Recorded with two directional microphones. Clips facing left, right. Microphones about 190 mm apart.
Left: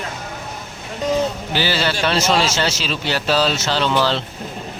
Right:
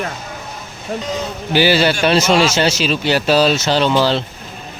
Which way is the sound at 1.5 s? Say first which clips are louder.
Right 10 dB; 15° right (ahead or behind).